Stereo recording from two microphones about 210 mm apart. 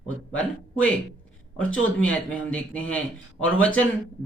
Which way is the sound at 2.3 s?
5° left (ahead or behind).